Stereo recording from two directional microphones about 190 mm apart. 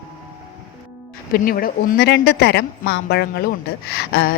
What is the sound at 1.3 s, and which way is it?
A woman's voice, 50° left (ahead or behind).